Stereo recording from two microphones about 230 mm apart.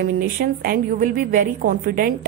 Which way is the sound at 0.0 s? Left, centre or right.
Right.